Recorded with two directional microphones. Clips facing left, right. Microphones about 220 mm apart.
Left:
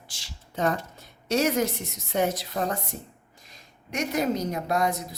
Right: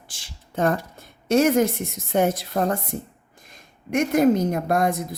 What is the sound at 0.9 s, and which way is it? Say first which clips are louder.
A woman's voice: right 6 dB; 50° right (ahead or behind).